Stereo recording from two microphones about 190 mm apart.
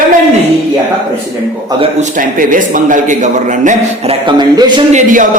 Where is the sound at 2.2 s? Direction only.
45° right (ahead or behind).